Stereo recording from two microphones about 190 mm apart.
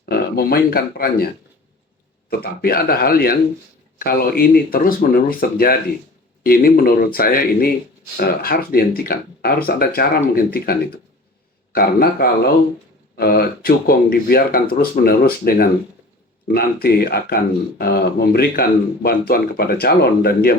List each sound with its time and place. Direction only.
0.0 s speech: 55° left (ahead or behind)
2.4 s speech: 55° left (ahead or behind)